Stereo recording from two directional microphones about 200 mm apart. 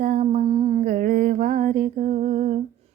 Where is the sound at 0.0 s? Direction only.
40° right (ahead or behind).